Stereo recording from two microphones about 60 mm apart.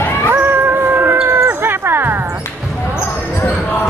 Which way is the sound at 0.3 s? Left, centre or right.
Right.